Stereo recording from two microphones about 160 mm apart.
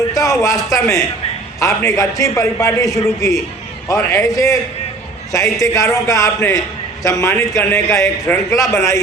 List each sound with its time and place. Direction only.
0.1 s a man's voice: 20° left (ahead or behind)